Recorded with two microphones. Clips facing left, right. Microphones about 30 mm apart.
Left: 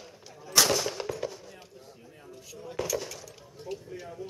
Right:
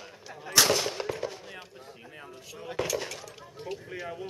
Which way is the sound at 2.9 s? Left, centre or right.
Centre.